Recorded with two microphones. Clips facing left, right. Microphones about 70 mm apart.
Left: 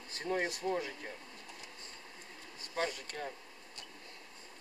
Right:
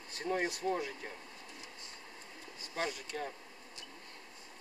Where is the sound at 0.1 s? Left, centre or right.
Centre.